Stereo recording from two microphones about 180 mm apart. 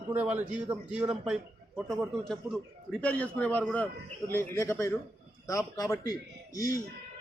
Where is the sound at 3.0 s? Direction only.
5° left (ahead or behind).